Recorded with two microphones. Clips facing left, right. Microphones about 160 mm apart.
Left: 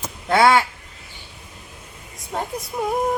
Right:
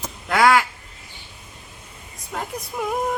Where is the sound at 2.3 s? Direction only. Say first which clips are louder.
Left 3 dB; 30° left (ahead or behind).